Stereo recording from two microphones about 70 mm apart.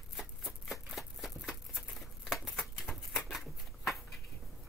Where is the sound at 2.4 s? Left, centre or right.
Centre.